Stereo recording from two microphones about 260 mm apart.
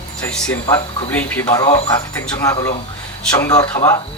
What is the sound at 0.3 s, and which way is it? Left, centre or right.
Speech, centre.